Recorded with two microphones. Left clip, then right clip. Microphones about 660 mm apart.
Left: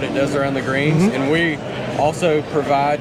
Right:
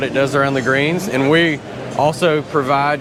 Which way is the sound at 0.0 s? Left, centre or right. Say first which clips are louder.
Right 3 dB; right.